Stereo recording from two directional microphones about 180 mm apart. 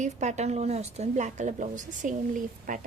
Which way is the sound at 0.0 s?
40° right (ahead or behind).